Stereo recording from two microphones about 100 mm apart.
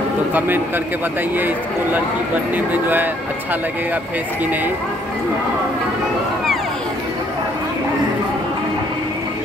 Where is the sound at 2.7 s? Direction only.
20° right (ahead or behind).